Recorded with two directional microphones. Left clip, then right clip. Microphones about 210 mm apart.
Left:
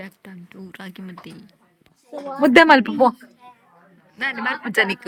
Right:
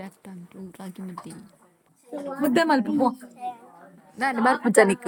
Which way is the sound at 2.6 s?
30° left (ahead or behind).